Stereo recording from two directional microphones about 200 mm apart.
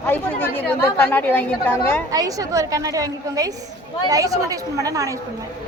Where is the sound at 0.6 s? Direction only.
10° left (ahead or behind).